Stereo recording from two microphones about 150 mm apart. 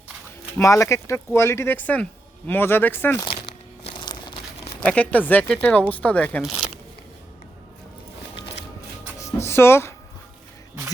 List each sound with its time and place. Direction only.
0.6 s speech: 20° left (ahead or behind)
3.4 s crumpling: 35° left (ahead or behind)
4.8 s speech: 10° left (ahead or behind)
9.2 s music: 15° left (ahead or behind)